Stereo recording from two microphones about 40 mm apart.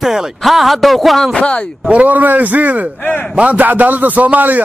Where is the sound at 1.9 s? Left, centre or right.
Right.